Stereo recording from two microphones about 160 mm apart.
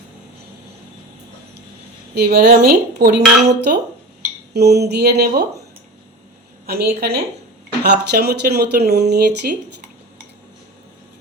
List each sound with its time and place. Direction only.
2.1 s a woman's voice: 75° right (ahead or behind)
6.7 s a woman's voice: 80° right